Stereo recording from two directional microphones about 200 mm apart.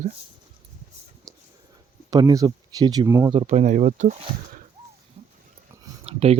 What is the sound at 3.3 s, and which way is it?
Speech, 30° right (ahead or behind).